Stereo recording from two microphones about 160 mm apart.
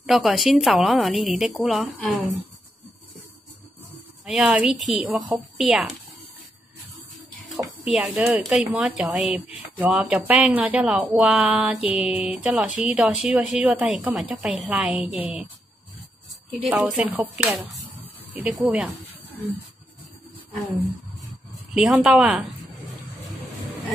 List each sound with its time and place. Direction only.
0.0 s speech: centre (ahead or behind)
4.3 s speech: 5° right (ahead or behind)
7.4 s a sound: centre (ahead or behind)
8.3 s speech: centre (ahead or behind)
16.4 s speech: 5° right (ahead or behind)
21.7 s speech: centre (ahead or behind)